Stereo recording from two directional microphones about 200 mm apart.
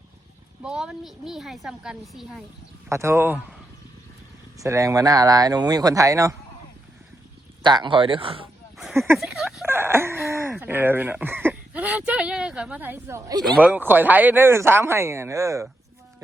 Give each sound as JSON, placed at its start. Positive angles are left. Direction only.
{"t": 0.6, "sound": "a woman's voice", "side_deg": -5}
{"t": 2.9, "sound": "speech", "side_deg": -15}
{"t": 4.5, "sound": "speech", "side_deg": -15}
{"t": 7.6, "sound": "speech", "side_deg": -20}
{"t": 8.8, "sound": "a sound", "side_deg": 0}
{"t": 9.1, "sound": "speech", "side_deg": 0}
{"t": 13.4, "sound": "speech", "side_deg": -5}